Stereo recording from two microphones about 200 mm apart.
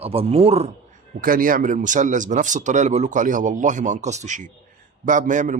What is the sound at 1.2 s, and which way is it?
Speech, 45° right (ahead or behind).